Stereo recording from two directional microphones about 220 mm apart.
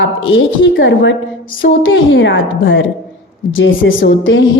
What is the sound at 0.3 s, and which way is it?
A woman's voice, 60° left (ahead or behind).